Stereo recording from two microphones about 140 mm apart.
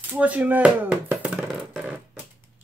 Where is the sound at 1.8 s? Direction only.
10° right (ahead or behind).